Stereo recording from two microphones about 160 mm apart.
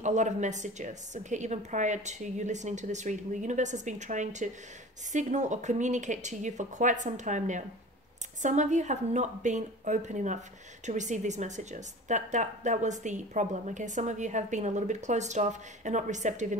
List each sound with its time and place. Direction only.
0.0 s a woman's voice: 45° right (ahead or behind)